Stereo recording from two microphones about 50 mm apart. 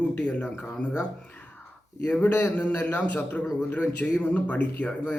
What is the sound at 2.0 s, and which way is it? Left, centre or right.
Speech, left.